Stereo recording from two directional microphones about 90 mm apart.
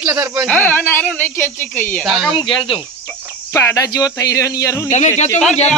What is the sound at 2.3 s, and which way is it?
Speech, 65° left (ahead or behind).